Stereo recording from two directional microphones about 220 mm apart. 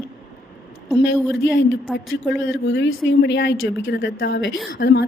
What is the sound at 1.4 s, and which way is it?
Speech, 55° left (ahead or behind).